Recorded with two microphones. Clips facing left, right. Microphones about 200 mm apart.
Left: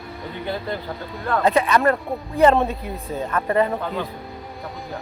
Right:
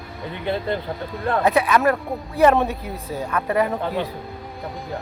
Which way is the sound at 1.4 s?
5° right (ahead or behind).